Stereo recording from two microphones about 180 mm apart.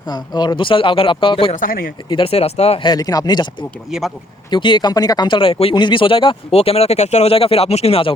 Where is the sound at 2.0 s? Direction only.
30° left (ahead or behind).